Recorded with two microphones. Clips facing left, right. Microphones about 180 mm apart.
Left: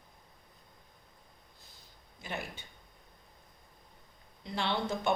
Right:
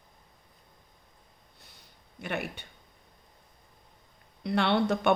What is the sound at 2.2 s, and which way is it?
Speech, 65° right (ahead or behind).